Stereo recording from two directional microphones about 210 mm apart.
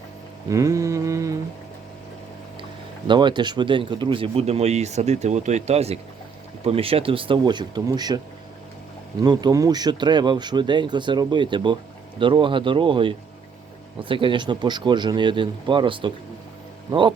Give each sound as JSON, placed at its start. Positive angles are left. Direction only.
{"t": 0.4, "sound": "a sound", "side_deg": -15}
{"t": 3.1, "sound": "speech", "side_deg": -20}
{"t": 9.2, "sound": "speech", "side_deg": -20}